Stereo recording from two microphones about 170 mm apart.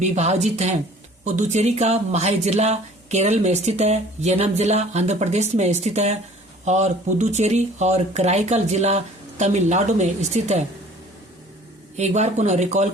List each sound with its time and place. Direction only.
0.0 s speech: 40° right (ahead or behind)
11.9 s speech: 40° right (ahead or behind)